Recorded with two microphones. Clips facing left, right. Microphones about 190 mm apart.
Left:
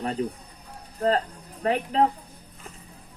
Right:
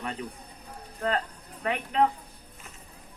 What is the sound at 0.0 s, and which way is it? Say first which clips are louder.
A woman's voice: left 7 dB; 35° left (ahead or behind).